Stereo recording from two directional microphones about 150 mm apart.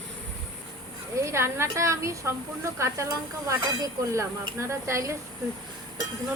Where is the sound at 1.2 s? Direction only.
20° right (ahead or behind).